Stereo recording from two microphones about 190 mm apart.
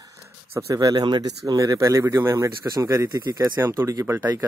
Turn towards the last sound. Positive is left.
turn(degrees=-15)  # may be behind; listen again after turning